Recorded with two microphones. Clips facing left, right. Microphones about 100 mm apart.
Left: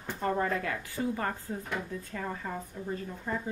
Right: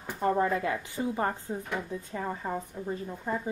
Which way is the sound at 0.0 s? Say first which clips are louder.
Right 3 dB; 10° right (ahead or behind).